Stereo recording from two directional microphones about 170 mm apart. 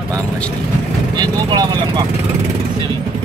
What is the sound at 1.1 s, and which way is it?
Speech, 25° right (ahead or behind).